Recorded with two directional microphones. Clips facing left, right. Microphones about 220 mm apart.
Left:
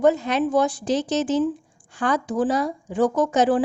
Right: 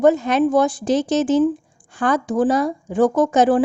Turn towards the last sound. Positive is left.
turn(degrees=-50)  # may be behind; listen again after turning